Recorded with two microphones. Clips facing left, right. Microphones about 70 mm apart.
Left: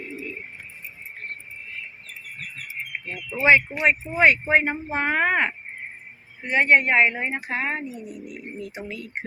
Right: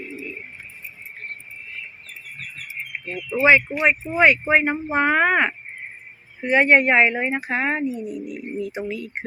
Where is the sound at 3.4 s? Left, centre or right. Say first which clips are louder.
Right 2 dB; centre.